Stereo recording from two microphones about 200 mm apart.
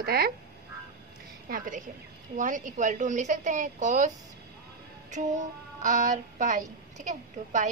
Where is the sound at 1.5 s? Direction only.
40° right (ahead or behind).